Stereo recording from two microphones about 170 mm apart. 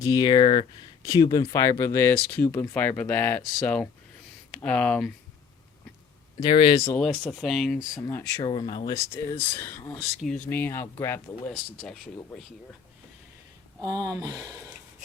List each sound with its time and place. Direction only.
0.0 s speech: 25° left (ahead or behind); by 5.1 s 5° left (ahead or behind)
6.4 s speech: 30° left (ahead or behind)
7.0 s speech: 5° left (ahead or behind)
7.9 s speech: 20° left (ahead or behind)
11.5 s speech: 5° left (ahead or behind)
13.8 s speech: 20° right (ahead or behind)